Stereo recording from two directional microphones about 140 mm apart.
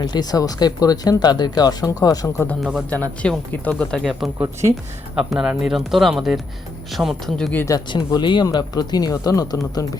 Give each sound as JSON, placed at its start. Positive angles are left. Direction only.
{"t": 0.0, "sound": "speech", "side_deg": 30}
{"t": 2.6, "sound": "speech", "side_deg": -5}
{"t": 2.9, "sound": "speech", "side_deg": 10}
{"t": 7.5, "sound": "speech", "side_deg": 20}
{"t": 7.9, "sound": "speech", "side_deg": 35}